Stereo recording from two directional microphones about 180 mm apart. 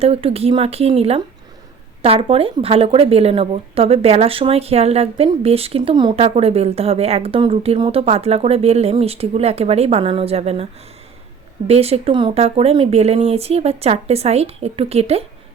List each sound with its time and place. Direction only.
0.0 s speech: 35° right (ahead or behind)
11.7 s speech: 35° right (ahead or behind)